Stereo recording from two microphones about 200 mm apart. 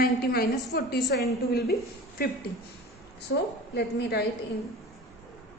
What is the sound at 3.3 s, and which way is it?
Speech, 70° left (ahead or behind).